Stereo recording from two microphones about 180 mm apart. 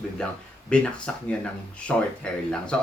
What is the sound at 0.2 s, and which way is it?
Speech, 5° left (ahead or behind).